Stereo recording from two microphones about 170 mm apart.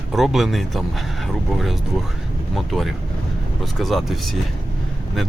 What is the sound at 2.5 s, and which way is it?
Speech, centre (ahead or behind).